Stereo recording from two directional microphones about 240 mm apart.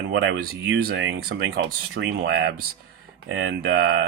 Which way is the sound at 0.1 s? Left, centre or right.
Right.